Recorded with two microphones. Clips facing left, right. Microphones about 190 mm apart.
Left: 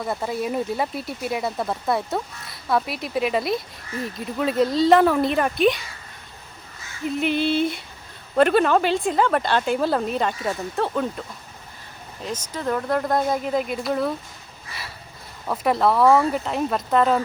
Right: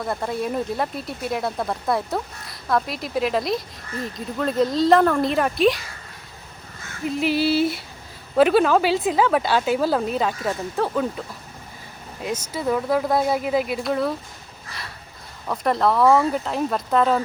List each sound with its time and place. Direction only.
0.0 s speech: centre (ahead or behind)
7.0 s speech: 5° right (ahead or behind)
12.2 s speech: 10° right (ahead or behind)
15.4 s speech: centre (ahead or behind)